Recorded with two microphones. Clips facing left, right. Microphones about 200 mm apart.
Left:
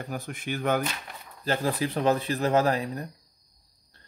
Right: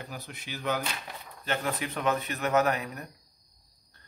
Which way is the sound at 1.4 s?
35° left (ahead or behind).